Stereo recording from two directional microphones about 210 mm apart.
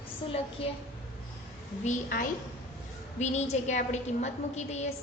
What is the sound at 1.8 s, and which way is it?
A woman's voice, 40° left (ahead or behind).